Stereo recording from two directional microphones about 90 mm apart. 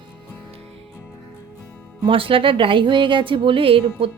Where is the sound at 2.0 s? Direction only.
85° right.